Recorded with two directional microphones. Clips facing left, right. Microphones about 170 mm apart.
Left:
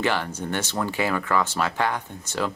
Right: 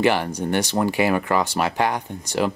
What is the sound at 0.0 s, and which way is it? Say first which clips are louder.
Speech: right 5 dB; 15° right (ahead or behind).